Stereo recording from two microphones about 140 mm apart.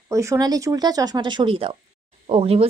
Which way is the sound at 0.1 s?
20° right (ahead or behind).